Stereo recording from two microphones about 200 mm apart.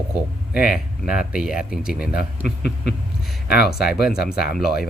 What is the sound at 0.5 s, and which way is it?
Speech, 5° right (ahead or behind).